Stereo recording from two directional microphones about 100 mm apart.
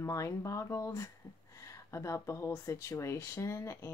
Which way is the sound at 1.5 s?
30° left (ahead or behind).